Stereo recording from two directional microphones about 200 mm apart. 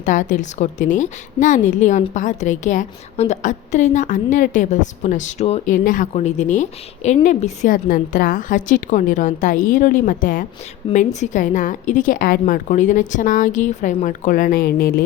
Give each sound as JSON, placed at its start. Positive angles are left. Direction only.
{"t": 0.0, "sound": "a woman's voice", "side_deg": 40}